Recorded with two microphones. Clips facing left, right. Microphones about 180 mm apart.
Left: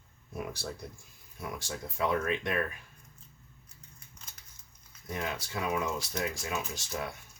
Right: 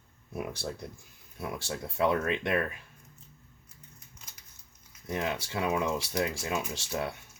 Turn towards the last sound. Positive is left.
turn(degrees=-30)  # may be behind; listen again after turning